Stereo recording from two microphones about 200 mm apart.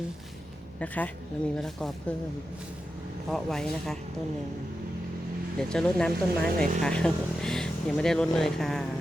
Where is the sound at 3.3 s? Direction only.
Centre (ahead or behind).